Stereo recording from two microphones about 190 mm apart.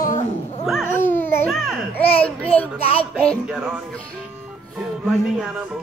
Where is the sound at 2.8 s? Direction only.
30° left (ahead or behind).